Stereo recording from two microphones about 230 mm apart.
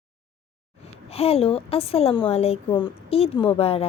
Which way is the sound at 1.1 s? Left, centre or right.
Left.